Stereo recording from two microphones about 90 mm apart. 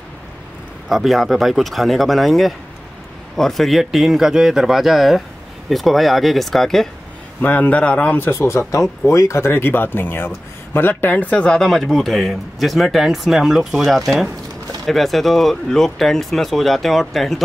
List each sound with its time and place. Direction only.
0.8 s speech: centre (ahead or behind)
7.4 s speech: 15° left (ahead or behind)
8.3 s speech: 30° left (ahead or behind); by 17.4 s centre (ahead or behind)